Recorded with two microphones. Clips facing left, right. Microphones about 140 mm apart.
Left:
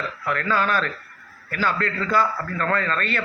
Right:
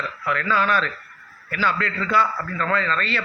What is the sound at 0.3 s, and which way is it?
A man's voice, 45° left (ahead or behind).